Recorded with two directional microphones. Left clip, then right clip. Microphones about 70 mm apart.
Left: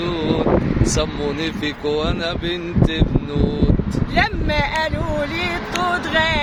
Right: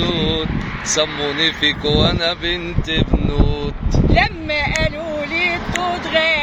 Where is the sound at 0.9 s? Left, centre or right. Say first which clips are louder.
Right 3 dB; left.